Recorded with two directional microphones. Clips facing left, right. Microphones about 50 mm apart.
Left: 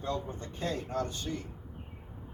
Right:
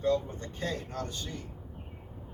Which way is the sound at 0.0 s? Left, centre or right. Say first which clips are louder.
Right 6 dB; left.